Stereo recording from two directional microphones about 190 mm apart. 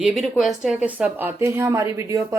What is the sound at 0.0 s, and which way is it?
A woman's voice, 5° right (ahead or behind).